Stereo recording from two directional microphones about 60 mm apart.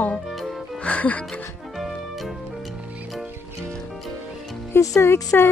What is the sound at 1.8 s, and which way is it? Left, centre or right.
Music, centre.